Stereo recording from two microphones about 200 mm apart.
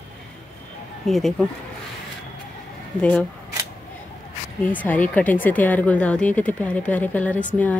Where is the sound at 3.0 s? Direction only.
5° left (ahead or behind).